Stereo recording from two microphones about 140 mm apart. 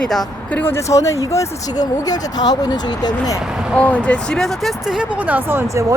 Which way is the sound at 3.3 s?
5° right (ahead or behind).